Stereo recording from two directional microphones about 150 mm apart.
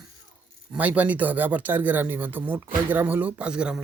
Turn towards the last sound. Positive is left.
turn(degrees=-5)  # may be behind; listen again after turning